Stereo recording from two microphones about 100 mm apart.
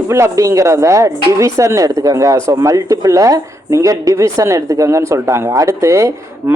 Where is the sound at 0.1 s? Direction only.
30° right (ahead or behind).